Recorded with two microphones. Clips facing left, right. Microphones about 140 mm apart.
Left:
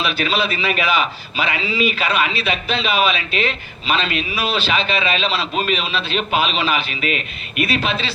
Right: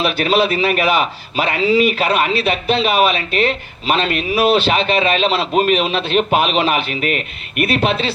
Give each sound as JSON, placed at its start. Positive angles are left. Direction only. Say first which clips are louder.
{"t": 0.0, "sound": "a man's voice", "louder": "right 5 dB", "side_deg": -55}